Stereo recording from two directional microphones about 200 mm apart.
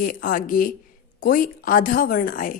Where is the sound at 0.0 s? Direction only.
45° left (ahead or behind).